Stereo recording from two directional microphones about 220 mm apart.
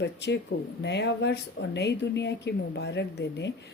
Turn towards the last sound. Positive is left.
turn(degrees=50)  # may be behind; listen again after turning